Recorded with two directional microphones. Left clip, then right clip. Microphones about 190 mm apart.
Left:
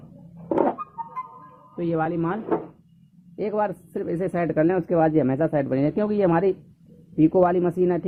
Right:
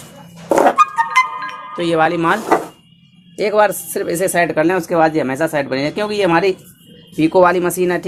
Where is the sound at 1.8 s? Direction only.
Centre (ahead or behind).